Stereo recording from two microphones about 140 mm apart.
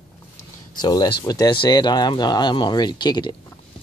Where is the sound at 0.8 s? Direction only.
30° left (ahead or behind).